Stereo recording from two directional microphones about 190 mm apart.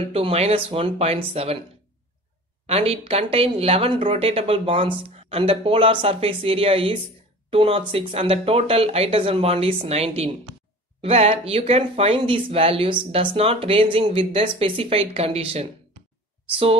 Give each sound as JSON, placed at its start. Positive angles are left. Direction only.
{"t": 0.1, "sound": "speech", "side_deg": -30}
{"t": 2.6, "sound": "speech", "side_deg": -30}